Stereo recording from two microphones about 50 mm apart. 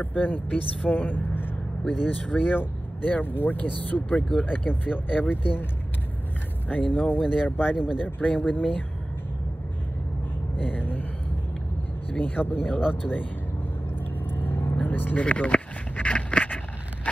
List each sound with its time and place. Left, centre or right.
0.0 s speech: left
6.7 s speech: left
10.6 s a sound: left
12.1 s speech: left
14.2 s vehicle: left
15.2 s a sound: left